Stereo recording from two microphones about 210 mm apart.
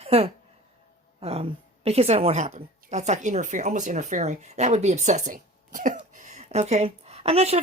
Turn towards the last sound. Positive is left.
turn(degrees=-30)  # may be behind; listen again after turning